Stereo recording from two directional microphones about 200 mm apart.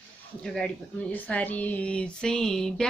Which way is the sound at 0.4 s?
5° left (ahead or behind).